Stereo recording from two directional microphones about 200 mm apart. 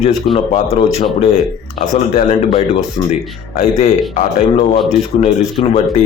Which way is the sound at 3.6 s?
35° left (ahead or behind).